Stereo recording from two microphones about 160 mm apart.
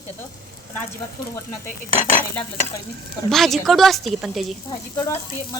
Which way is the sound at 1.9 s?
35° left (ahead or behind).